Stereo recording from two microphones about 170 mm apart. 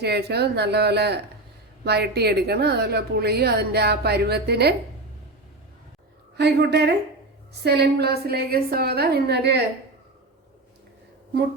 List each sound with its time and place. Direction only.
0.0 s a woman's voice: 75° right (ahead or behind)
6.3 s a woman's voice: 80° right